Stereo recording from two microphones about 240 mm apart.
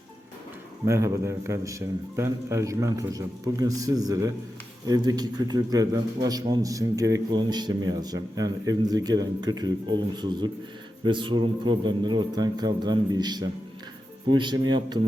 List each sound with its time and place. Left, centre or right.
0.9 s a man's voice: centre